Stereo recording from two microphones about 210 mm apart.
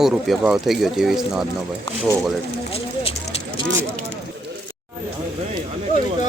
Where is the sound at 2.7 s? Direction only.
25° left (ahead or behind).